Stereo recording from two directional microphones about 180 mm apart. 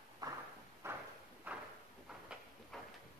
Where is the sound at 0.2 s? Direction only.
20° right (ahead or behind).